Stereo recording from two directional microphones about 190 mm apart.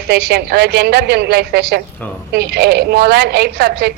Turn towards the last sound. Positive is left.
turn(degrees=-60)  # may be behind; listen again after turning